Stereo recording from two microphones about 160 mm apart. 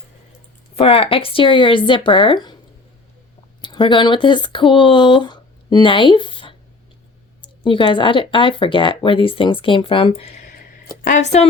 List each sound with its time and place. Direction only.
0.8 s speech: 35° left (ahead or behind)
3.6 s speech: 30° left (ahead or behind)
11.0 s speech: 50° left (ahead or behind)